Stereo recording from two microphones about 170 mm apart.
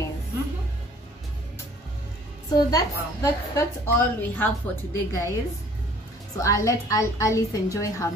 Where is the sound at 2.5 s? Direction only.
20° left (ahead or behind).